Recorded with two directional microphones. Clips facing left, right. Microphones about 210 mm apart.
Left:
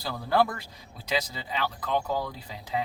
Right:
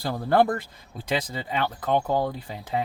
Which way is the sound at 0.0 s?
55° right (ahead or behind).